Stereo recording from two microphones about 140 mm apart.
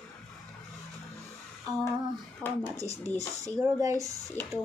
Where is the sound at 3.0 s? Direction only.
15° left (ahead or behind).